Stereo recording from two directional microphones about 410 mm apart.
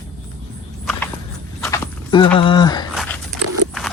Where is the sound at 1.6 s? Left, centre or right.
Centre.